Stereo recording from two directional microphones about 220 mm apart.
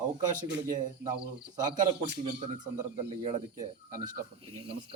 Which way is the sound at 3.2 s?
35° right (ahead or behind).